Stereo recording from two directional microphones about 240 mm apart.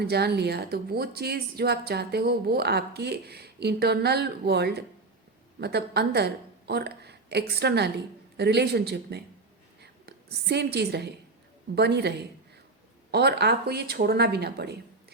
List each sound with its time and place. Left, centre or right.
0.0 s a woman's voice: right